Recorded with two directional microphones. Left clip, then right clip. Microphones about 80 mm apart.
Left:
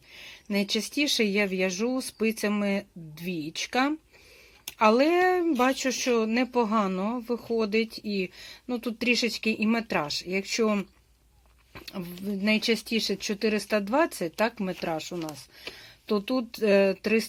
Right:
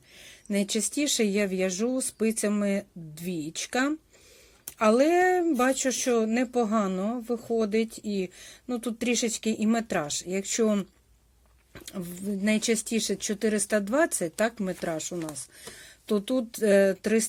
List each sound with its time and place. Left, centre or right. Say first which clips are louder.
0.7 s speech: left 3 dB; centre
1.2 s speech: left 1 dB; right
10.6 s speech: right 1 dB; right
12.4 s speech: left 1 dB; centre
13.9 s speech: left 1 dB; right